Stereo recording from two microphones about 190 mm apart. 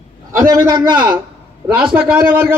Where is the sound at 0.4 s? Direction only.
15° right (ahead or behind).